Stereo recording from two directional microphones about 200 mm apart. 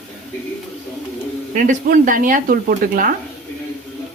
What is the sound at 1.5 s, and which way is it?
Speech, 40° right (ahead or behind).